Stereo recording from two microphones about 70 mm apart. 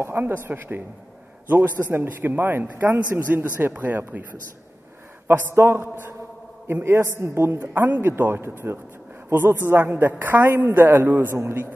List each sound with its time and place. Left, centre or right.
0.0 s a man's voice: right
5.3 s a woman's voice: right